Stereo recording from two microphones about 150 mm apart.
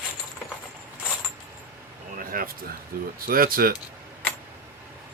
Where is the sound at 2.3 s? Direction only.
70° right (ahead or behind).